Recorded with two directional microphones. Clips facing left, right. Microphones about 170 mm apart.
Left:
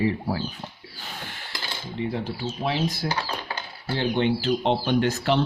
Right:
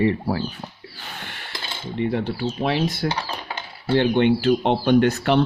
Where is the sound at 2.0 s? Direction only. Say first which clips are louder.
Right 5 dB; 65° right (ahead or behind).